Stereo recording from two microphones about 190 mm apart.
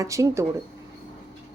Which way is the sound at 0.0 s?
15° right (ahead or behind).